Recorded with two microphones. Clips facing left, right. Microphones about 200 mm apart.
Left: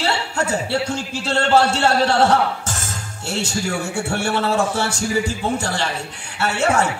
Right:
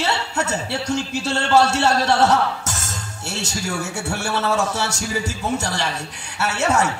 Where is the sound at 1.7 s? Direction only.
30° left (ahead or behind).